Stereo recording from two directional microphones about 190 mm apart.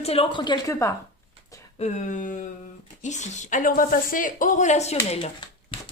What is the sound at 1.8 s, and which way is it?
Speech, 40° left (ahead or behind).